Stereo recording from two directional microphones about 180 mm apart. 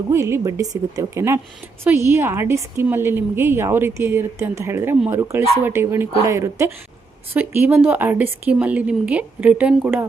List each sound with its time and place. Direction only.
0.1 s a woman's voice: 15° right (ahead or behind)